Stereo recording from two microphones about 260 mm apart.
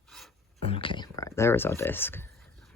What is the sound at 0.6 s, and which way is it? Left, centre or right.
Speech, left.